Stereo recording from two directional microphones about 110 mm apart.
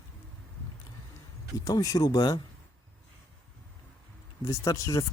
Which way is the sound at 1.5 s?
35° left (ahead or behind).